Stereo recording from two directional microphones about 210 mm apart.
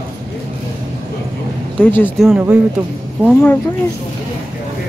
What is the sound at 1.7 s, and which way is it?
Speech, 10° left (ahead or behind).